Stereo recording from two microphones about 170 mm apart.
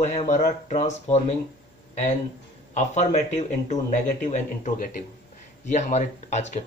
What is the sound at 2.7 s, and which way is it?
A man's voice, 45° left (ahead or behind).